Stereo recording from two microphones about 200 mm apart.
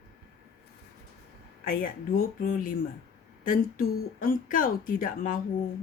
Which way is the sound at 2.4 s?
40° left (ahead or behind).